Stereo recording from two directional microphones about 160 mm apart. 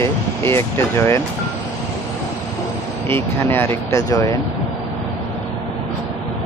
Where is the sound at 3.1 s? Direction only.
15° left (ahead or behind).